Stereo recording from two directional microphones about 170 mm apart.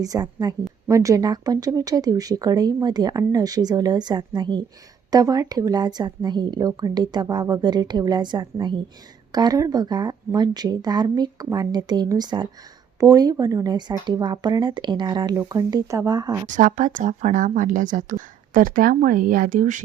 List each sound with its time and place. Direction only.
0.0 s speech: 20° right (ahead or behind)
16.5 s a woman's voice: 50° right (ahead or behind)